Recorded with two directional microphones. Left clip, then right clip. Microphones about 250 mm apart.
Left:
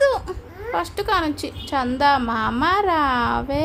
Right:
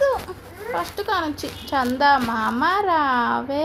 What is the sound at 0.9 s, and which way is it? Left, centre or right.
Speech, centre.